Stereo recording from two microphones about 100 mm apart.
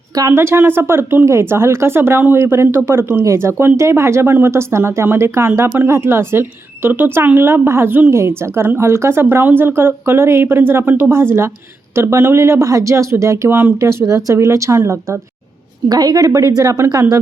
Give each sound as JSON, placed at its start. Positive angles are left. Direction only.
{"t": 0.1, "sound": "a woman's voice", "side_deg": -30}
{"t": 15.9, "sound": "a woman's voice", "side_deg": -40}